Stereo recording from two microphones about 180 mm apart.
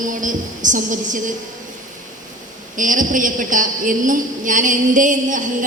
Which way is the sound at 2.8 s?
45° right (ahead or behind).